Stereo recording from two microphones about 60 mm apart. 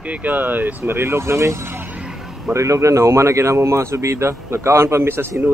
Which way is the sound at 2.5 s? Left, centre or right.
Right.